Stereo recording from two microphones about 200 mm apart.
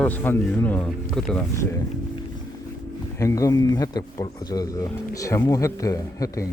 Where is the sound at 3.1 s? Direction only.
15° left (ahead or behind).